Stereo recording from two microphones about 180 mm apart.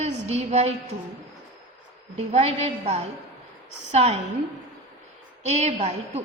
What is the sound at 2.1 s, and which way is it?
A woman's voice, 35° right (ahead or behind).